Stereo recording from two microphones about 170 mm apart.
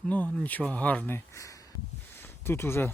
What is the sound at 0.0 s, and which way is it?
Speech, 5° left (ahead or behind).